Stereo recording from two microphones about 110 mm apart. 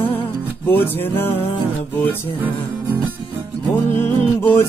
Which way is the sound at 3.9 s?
20° left (ahead or behind).